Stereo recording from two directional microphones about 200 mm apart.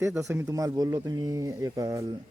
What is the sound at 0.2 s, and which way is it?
Speech, 15° right (ahead or behind).